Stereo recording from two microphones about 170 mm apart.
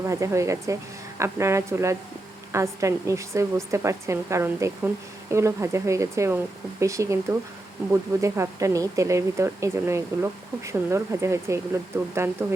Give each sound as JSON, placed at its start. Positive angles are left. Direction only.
{"t": 0.0, "sound": "a woman's voice", "side_deg": -20}